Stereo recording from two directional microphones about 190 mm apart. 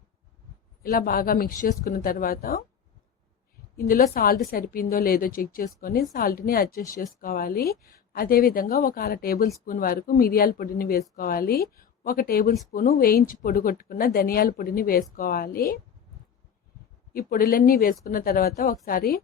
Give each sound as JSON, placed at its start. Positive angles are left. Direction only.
{"t": 0.8, "sound": "speech", "side_deg": 50}
{"t": 3.8, "sound": "speech", "side_deg": 50}
{"t": 17.2, "sound": "speech", "side_deg": 50}